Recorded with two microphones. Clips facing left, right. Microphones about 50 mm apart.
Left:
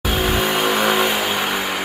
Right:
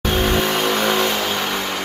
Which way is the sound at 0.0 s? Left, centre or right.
Centre.